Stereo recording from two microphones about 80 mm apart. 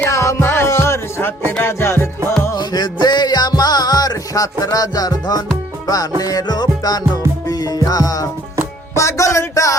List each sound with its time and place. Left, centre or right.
0.1 s music: left
2.6 s music: left